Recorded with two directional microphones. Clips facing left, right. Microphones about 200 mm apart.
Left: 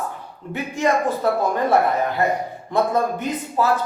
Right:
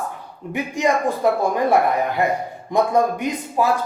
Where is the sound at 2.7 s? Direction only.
15° right (ahead or behind).